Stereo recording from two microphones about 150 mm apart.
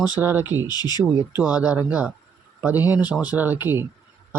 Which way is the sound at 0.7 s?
25° left (ahead or behind).